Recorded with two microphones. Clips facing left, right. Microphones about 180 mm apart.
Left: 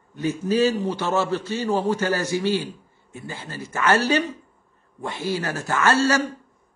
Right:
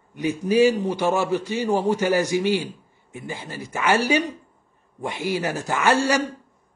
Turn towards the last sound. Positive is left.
turn(degrees=-15)  # may be behind; listen again after turning